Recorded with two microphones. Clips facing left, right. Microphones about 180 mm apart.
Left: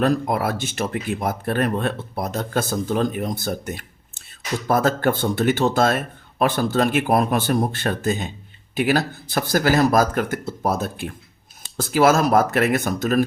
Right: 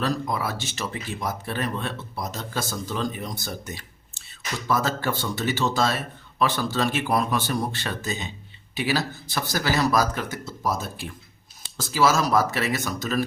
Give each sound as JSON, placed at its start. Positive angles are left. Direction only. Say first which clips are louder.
{"t": 0.0, "sound": "speech", "louder": "left 6 dB", "side_deg": 55}